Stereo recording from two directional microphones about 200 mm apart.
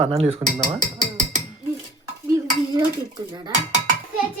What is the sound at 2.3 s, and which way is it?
Dishes, 20° right (ahead or behind).